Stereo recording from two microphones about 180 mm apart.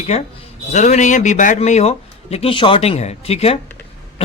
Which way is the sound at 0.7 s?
40° left (ahead or behind).